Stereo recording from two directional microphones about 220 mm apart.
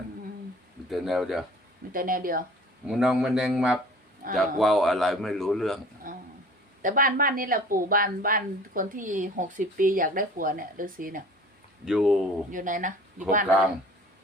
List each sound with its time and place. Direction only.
0.9 s a man's voice: centre (ahead or behind)
1.9 s a woman's voice: 40° right (ahead or behind)
2.8 s a man's voice: centre (ahead or behind)
6.0 s a sound: 40° right (ahead or behind)
6.8 s a woman's voice: 40° right (ahead or behind)
11.9 s a man's voice: centre (ahead or behind)
12.5 s a woman's voice: 35° right (ahead or behind)